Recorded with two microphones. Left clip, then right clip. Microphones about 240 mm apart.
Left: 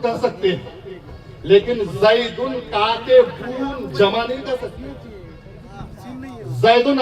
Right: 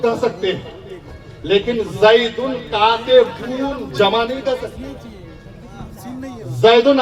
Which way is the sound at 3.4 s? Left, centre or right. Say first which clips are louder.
Right 3 dB; right.